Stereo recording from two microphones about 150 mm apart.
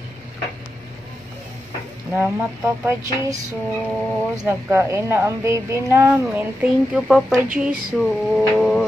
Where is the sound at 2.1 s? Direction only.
10° right (ahead or behind).